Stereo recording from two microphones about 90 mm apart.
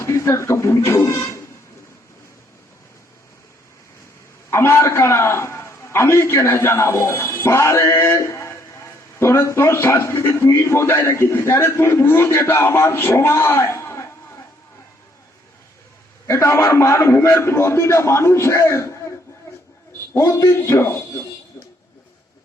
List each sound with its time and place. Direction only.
0.0 s speech: 30° left (ahead or behind)
4.5 s a man's voice: 30° left (ahead or behind)
16.2 s a man's voice: 30° left (ahead or behind)
20.1 s a man's voice: 35° left (ahead or behind)